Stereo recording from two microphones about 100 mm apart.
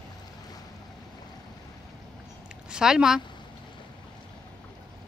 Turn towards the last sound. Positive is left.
turn(degrees=-5)  # may be behind; listen again after turning